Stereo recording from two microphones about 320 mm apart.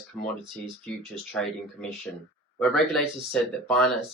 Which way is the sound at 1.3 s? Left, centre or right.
Centre.